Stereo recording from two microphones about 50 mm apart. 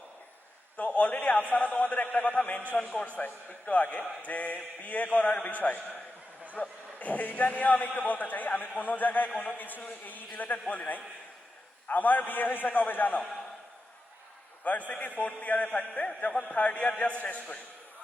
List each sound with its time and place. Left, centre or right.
0.8 s a man's voice: left
3.2 s a man's voice: left
14.6 s a man's voice: left